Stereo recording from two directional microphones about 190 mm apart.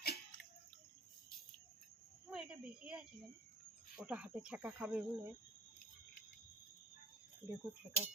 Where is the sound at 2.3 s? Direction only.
5° right (ahead or behind).